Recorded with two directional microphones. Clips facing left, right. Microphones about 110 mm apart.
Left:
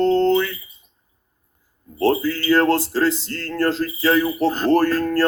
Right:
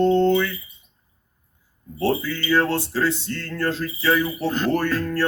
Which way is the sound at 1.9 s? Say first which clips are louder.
Left 4 dB; 40° left (ahead or behind).